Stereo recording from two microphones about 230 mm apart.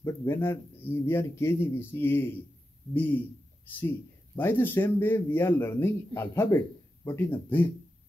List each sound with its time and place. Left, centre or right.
0.0 s speech: centre